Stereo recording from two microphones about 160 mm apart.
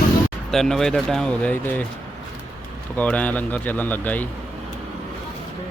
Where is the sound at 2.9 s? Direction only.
10° left (ahead or behind).